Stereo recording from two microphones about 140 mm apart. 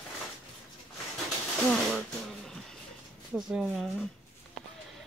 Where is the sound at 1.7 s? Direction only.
5° left (ahead or behind).